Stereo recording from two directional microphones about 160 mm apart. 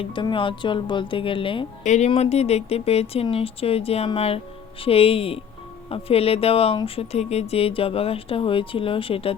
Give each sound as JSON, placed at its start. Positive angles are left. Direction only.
{"t": 0.0, "sound": "speech", "side_deg": 30}
{"t": 1.8, "sound": "speech", "side_deg": 50}